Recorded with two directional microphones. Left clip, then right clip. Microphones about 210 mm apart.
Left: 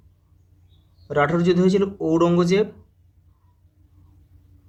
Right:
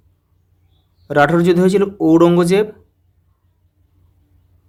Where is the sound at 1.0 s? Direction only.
40° right (ahead or behind).